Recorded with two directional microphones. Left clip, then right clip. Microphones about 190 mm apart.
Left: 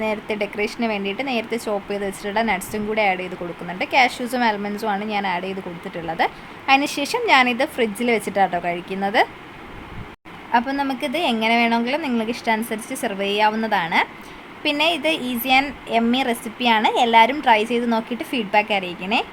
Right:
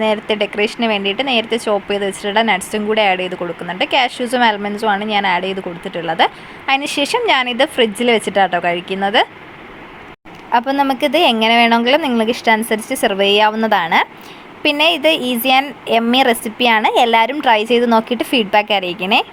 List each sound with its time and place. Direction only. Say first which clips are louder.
0.0 s speech: right 7 dB; 15° right (ahead or behind)
10.5 s a woman's voice: right 6 dB; 25° right (ahead or behind)